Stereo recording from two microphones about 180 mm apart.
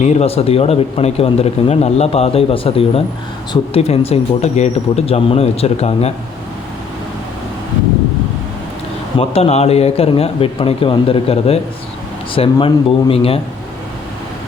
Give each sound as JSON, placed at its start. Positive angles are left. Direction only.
{"t": 0.0, "sound": "speech", "side_deg": 40}
{"t": 9.1, "sound": "speech", "side_deg": 35}